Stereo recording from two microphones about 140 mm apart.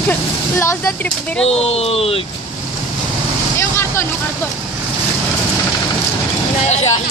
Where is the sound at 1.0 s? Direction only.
10° left (ahead or behind).